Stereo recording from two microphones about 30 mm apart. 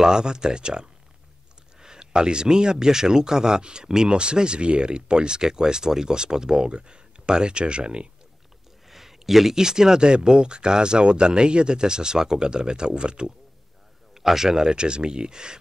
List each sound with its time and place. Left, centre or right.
0.0 s speech: right
8.8 s a sound: centre
9.6 s speech: centre
14.1 s a man's voice: centre
14.7 s speech: right